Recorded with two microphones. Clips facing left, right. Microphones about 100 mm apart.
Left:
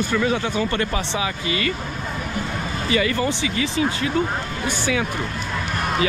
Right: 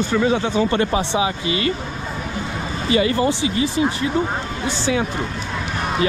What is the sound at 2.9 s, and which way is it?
Speech, 25° right (ahead or behind).